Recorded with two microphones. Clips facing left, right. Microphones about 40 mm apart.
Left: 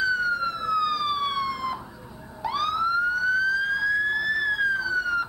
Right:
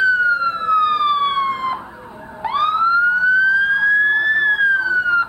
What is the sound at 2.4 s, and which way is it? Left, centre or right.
Emergency vehicle, right.